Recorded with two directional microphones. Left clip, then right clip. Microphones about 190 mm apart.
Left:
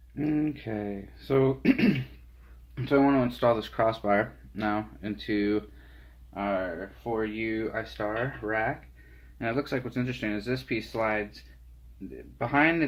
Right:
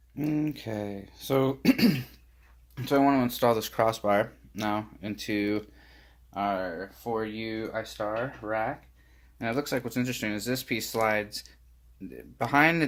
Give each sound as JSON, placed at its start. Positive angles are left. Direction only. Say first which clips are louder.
{"t": 0.2, "sound": "speech", "louder": "left 1 dB", "side_deg": -30}
{"t": 7.7, "sound": "speech", "louder": "even", "side_deg": -20}
{"t": 9.4, "sound": "speech", "louder": "even", "side_deg": -35}